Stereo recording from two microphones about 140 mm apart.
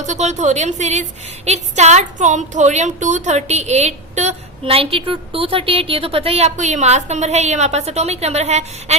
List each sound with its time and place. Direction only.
0.0 s a woman's voice: 55° right (ahead or behind)
4.6 s a woman's voice: 40° right (ahead or behind)